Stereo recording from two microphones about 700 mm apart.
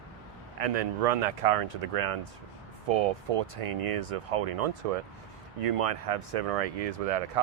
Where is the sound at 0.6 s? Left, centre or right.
Right.